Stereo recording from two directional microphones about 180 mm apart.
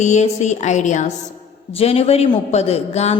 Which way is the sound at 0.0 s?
40° left (ahead or behind).